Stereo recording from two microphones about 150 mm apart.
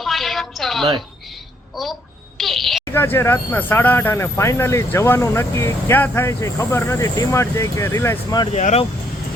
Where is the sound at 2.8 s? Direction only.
15° left (ahead or behind).